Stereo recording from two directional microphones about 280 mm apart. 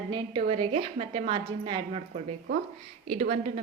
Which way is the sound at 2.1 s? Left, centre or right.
Right.